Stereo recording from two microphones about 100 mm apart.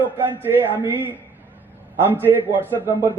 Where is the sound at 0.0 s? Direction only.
20° right (ahead or behind).